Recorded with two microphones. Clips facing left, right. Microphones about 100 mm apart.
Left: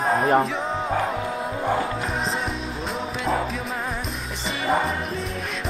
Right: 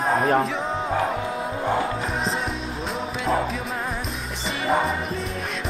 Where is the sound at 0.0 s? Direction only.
Centre (ahead or behind).